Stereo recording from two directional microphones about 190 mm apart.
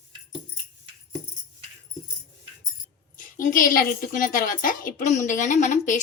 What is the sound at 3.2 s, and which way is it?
A woman's voice, 45° left (ahead or behind).